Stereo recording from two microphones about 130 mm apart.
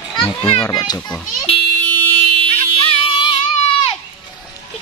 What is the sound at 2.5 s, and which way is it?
Music, 50° left (ahead or behind).